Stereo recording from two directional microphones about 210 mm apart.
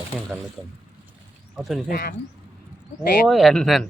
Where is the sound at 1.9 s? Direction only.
45° left (ahead or behind).